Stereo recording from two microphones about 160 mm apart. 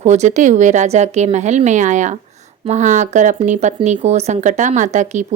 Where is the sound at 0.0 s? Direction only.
45° right (ahead or behind).